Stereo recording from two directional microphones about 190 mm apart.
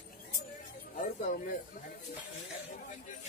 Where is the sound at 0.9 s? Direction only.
45° left (ahead or behind).